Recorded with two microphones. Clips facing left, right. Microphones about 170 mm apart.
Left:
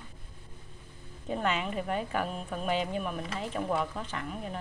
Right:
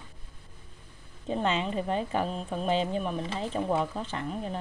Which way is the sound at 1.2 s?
25° right (ahead or behind).